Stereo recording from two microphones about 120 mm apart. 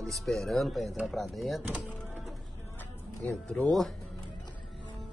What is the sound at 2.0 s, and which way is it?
Music, centre (ahead or behind).